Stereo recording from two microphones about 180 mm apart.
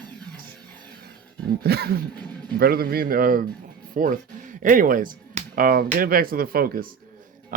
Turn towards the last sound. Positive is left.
turn(degrees=-55)  # may be behind; listen again after turning